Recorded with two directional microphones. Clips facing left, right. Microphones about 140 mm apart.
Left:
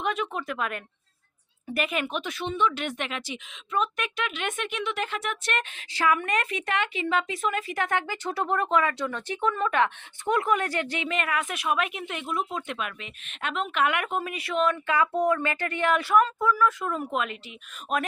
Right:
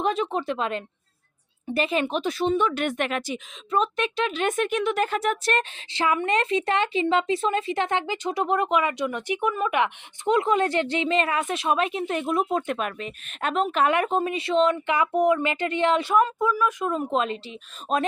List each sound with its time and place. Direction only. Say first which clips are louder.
0.0 s speech: right 5 dB; 30° right (ahead or behind)